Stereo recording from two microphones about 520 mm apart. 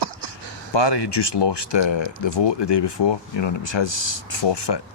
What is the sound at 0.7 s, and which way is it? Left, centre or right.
Speech, left.